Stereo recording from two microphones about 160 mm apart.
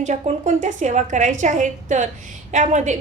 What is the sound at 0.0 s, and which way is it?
A woman's voice, 45° right (ahead or behind).